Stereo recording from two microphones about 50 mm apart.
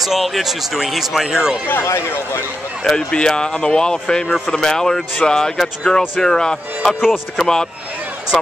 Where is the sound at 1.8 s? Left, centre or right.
Left.